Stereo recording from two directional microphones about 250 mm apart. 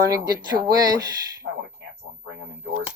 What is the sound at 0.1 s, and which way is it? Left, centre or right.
Speech, centre.